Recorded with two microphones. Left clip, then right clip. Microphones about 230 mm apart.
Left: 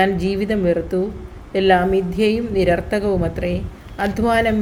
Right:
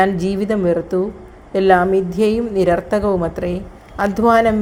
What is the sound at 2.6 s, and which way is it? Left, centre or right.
A woman's voice, right.